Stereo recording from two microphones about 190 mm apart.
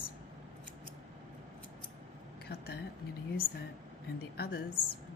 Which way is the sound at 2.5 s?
55° left (ahead or behind).